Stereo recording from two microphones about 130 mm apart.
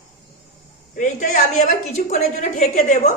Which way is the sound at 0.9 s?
75° left (ahead or behind).